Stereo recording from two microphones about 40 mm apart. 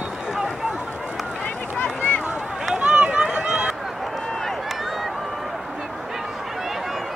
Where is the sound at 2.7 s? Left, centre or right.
Right.